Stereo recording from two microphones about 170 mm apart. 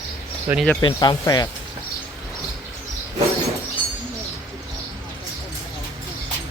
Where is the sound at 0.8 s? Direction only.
25° left (ahead or behind).